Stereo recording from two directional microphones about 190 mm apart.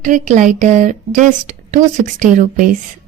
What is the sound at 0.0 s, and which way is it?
A woman's voice, 40° right (ahead or behind).